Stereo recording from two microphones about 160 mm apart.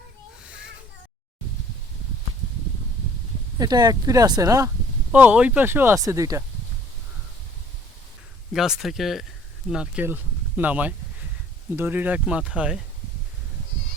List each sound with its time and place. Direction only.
3.6 s speech: 25° right (ahead or behind)
5.1 s speech: 10° right (ahead or behind)
8.5 s speech: 5° right (ahead or behind)